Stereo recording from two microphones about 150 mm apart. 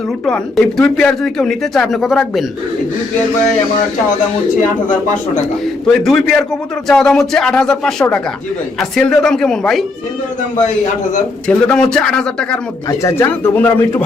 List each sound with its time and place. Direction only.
0.3 s speech: 5° left (ahead or behind)
5.8 s speech: centre (ahead or behind)
11.4 s speech: 5° left (ahead or behind)
13.0 s speech: 15° left (ahead or behind)